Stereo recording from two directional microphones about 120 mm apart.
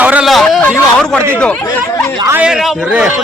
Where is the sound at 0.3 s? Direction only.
Centre (ahead or behind).